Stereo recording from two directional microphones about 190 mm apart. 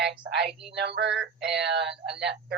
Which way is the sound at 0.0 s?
60° right (ahead or behind).